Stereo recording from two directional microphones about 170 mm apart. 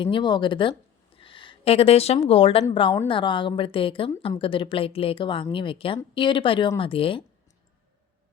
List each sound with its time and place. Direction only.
0.0 s speech: 30° left (ahead or behind)